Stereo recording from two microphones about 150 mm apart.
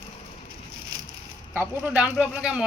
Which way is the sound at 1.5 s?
10° right (ahead or behind).